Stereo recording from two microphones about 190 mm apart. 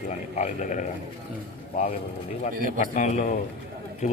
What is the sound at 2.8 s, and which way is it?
A man's voice, 40° left (ahead or behind).